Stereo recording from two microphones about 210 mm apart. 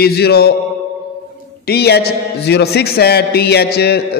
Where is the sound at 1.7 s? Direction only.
50° left (ahead or behind).